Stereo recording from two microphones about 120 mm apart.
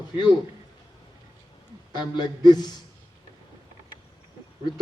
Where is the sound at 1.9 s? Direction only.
35° left (ahead or behind).